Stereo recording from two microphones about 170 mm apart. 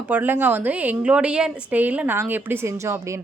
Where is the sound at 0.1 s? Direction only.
10° right (ahead or behind).